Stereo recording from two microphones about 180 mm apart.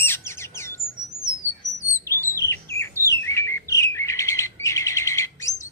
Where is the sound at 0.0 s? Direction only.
15° left (ahead or behind).